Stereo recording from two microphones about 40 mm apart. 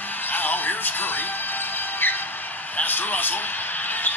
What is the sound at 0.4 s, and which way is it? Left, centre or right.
Music, left.